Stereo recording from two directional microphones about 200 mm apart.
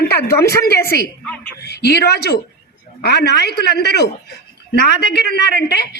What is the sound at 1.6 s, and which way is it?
A woman's voice, 55° left (ahead or behind).